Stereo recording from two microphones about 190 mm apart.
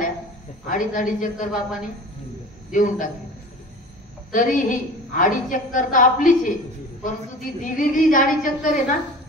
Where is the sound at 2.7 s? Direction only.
45° left (ahead or behind).